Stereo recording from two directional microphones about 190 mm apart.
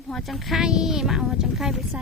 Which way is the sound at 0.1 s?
Centre (ahead or behind).